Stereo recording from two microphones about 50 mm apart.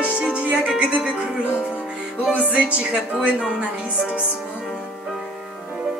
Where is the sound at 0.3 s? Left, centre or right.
Right.